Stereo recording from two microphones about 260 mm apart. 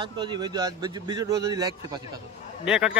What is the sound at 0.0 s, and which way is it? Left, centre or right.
Speech, centre.